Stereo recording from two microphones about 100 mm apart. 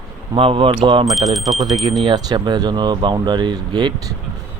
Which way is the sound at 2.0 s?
50° right (ahead or behind).